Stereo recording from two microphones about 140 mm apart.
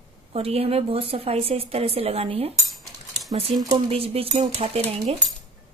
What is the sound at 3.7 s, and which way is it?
A woman's voice, 45° right (ahead or behind).